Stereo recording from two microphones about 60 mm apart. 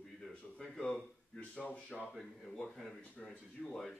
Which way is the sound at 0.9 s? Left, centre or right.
Centre.